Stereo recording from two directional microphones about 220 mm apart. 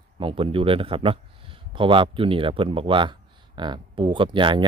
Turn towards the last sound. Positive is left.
turn(degrees=-20)  # may be behind; listen again after turning